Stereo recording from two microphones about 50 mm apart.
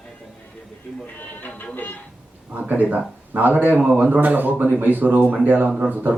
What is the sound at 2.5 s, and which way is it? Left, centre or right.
A man's voice, right.